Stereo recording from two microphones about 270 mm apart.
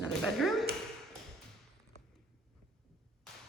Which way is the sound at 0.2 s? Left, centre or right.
Centre.